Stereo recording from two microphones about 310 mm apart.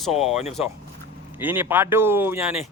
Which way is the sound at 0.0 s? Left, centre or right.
Centre.